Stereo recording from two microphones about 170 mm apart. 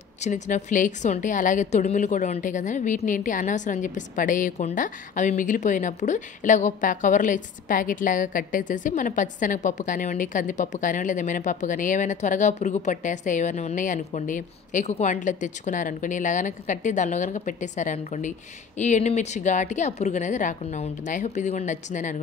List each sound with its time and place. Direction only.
0.2 s a woman's voice: 45° left (ahead or behind)